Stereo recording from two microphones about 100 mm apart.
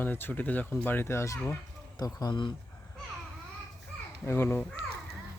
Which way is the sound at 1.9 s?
40° left (ahead or behind).